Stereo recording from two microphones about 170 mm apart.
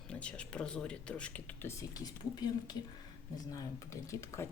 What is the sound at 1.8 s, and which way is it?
Speech, 25° left (ahead or behind).